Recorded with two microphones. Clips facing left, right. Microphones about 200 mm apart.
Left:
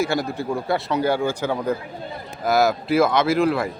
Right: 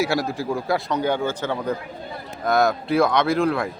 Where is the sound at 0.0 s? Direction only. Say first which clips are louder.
Even; centre (ahead or behind).